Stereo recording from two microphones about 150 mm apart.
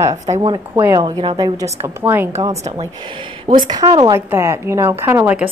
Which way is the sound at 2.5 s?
45° right (ahead or behind).